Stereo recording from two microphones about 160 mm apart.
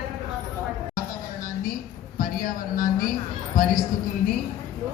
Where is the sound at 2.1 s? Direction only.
55° left (ahead or behind).